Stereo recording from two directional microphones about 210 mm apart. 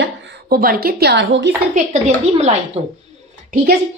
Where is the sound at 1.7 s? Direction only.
35° right (ahead or behind).